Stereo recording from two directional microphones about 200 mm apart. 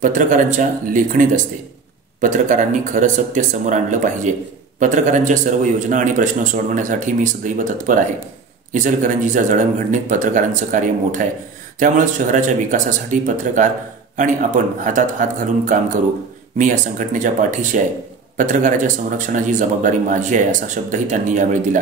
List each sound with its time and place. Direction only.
0.0 s a man's voice: 40° right (ahead or behind)